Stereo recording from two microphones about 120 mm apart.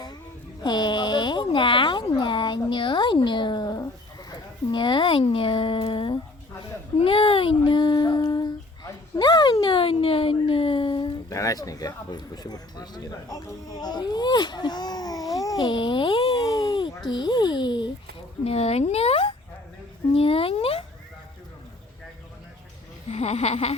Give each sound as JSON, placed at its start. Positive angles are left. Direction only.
{"t": 0.6, "sound": "a sound", "side_deg": 40}
{"t": 11.3, "sound": "speech", "side_deg": 25}
{"t": 16.5, "sound": "a sound", "side_deg": 40}
{"t": 17.1, "sound": "speech", "side_deg": 40}
{"t": 18.4, "sound": "speech", "side_deg": 60}
{"t": 23.0, "sound": "speech", "side_deg": 65}